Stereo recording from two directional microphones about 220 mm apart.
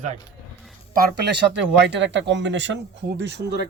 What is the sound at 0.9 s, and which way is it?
Speech, 45° right (ahead or behind).